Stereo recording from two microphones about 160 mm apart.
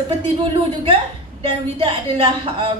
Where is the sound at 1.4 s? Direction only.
30° right (ahead or behind).